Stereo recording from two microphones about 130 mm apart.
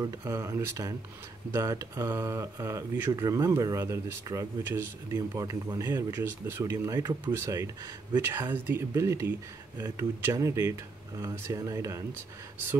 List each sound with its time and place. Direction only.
0.0 s speech: 25° right (ahead or behind)
8.2 s speech: 15° right (ahead or behind)